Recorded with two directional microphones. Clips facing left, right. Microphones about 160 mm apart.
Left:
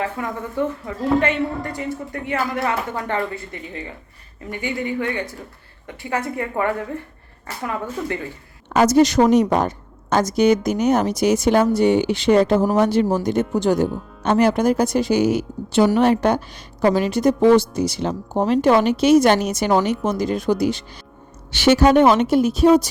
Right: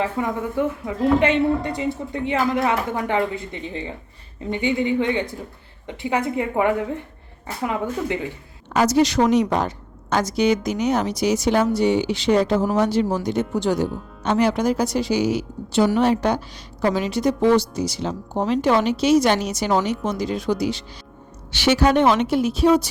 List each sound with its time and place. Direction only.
0.0 s a woman's voice: 20° right (ahead or behind)
8.7 s a woman's voice: 50° left (ahead or behind)